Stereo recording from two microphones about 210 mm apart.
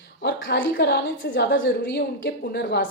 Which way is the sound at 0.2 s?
55° left (ahead or behind).